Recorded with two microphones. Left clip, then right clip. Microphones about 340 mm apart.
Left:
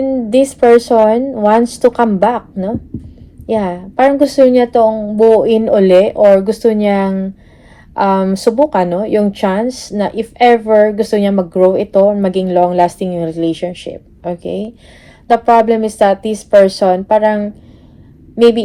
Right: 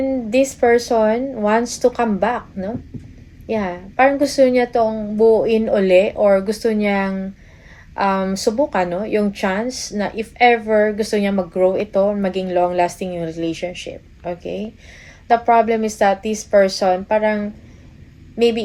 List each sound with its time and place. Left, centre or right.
0.3 s a woman's voice: left
5.8 s speech: left
6.1 s a woman's voice: centre
15.3 s a woman's voice: left